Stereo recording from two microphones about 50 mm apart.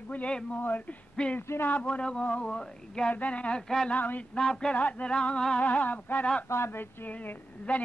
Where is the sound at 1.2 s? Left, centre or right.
Centre.